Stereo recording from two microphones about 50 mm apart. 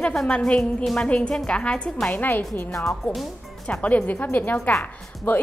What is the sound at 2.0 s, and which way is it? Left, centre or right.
Speech, left.